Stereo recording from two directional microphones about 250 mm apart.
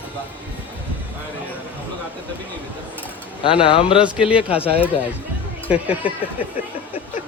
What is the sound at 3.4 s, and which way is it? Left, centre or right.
Speech, left.